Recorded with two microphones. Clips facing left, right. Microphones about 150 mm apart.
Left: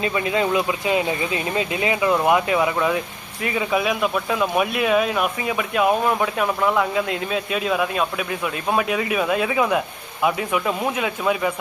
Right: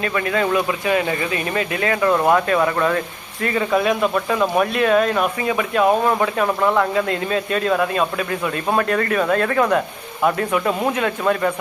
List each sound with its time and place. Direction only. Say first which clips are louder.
0.0 s speech: right 1 dB; 20° left (ahead or behind)